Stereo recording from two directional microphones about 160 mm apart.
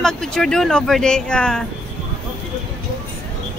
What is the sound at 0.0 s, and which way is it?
Speech, 5° left (ahead or behind).